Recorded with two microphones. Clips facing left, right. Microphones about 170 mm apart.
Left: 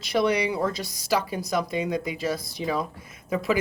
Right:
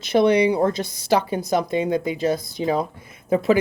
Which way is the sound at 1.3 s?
55° right (ahead or behind).